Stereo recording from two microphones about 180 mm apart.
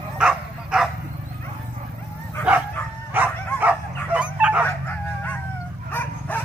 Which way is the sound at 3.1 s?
10° right (ahead or behind).